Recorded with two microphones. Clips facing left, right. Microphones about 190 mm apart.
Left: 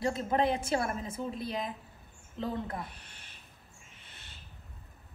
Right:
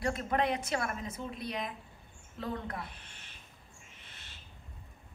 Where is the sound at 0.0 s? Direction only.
25° left (ahead or behind).